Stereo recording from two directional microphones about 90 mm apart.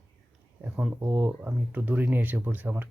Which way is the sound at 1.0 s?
20° right (ahead or behind).